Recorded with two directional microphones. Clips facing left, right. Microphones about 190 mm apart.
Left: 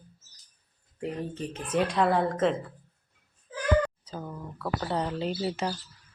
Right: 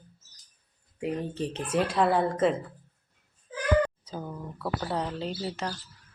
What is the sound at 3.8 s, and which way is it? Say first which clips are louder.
Speech: right 3 dB; 5° right (ahead or behind).